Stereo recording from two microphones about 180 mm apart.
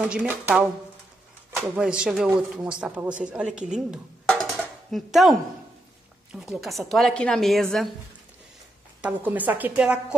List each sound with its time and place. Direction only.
0.0 s a woman's voice: 10° right (ahead or behind)
4.3 s dishes: 5° left (ahead or behind)
6.3 s speech: centre (ahead or behind)
9.0 s a woman's voice: 10° right (ahead or behind)